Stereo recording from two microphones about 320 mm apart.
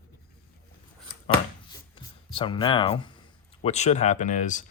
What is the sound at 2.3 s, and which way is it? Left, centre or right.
Speech, centre.